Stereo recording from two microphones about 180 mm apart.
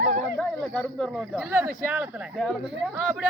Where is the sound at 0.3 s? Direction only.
Centre (ahead or behind).